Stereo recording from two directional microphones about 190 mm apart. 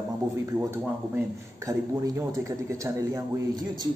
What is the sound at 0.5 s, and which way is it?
A man's voice, 15° right (ahead or behind).